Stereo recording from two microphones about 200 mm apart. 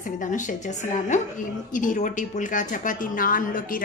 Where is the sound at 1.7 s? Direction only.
40° left (ahead or behind).